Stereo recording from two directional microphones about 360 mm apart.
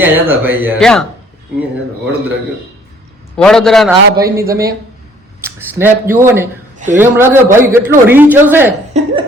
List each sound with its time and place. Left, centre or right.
0.0 s speech: centre
3.3 s speech: centre
6.7 s a man's voice: right
7.0 s speech: centre
8.9 s speech: centre